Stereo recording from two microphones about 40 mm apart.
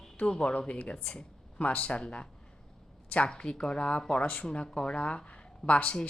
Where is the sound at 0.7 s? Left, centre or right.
Left.